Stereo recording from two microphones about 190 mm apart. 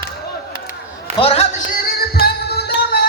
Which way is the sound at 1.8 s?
55° left (ahead or behind).